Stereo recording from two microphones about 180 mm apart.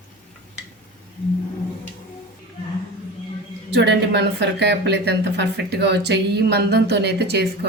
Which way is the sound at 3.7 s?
70° right (ahead or behind).